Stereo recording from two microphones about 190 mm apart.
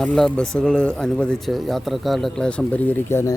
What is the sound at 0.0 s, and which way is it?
Speech, 5° left (ahead or behind).